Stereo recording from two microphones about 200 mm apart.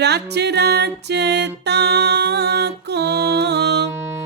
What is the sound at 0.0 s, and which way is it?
Music, 55° right (ahead or behind).